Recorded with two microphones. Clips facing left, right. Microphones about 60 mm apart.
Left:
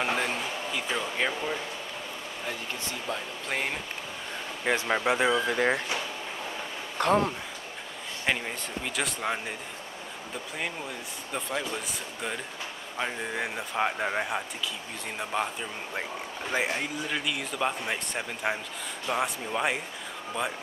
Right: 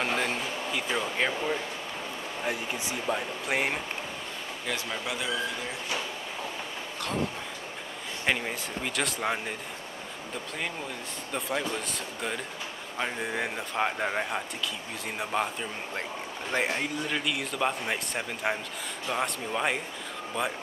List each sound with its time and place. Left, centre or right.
0.0 s a sound: centre
2.4 s speech: centre
4.6 s speech: left
7.0 s speech: left
8.3 s speech: centre
11.3 s speech: centre
16.0 s speech: centre